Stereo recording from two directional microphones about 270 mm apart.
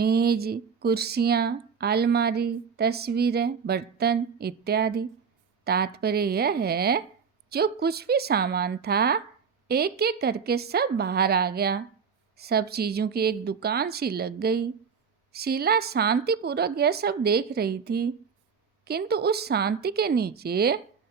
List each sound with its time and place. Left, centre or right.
0.0 s speech: right